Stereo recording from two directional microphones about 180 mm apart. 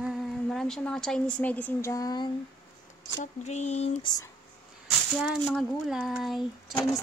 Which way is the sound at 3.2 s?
40° left (ahead or behind).